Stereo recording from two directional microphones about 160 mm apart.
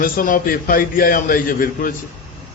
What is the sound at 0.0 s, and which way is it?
A man's voice, 55° left (ahead or behind).